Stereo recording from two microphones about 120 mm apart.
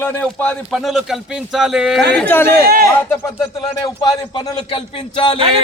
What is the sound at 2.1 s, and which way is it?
Speech, 15° left (ahead or behind).